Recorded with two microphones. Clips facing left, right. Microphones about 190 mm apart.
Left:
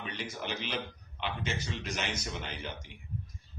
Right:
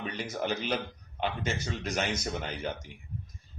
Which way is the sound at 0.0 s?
45° right (ahead or behind).